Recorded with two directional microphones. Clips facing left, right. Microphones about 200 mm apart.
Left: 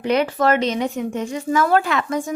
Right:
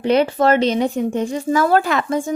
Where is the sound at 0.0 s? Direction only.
30° right (ahead or behind).